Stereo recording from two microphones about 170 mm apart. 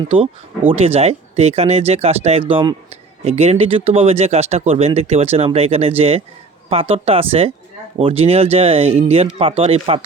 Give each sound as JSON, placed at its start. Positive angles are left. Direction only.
{"t": 0.7, "sound": "speech", "side_deg": -35}